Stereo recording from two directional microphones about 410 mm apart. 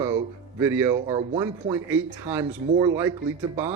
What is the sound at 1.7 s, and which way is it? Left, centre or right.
Speech, centre.